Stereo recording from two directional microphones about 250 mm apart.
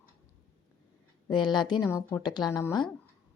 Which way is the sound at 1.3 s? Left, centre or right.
Centre.